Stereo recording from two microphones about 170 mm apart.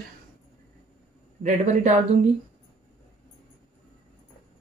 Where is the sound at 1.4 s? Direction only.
45° right (ahead or behind).